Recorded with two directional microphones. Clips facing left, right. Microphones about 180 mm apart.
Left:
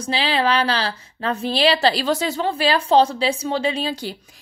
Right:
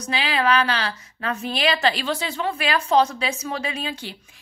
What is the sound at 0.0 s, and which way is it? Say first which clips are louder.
A woman's voice: left 2 dB; 30° left (ahead or behind).